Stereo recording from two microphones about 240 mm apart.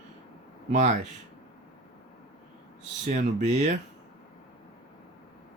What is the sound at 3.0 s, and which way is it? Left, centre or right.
Speech, right.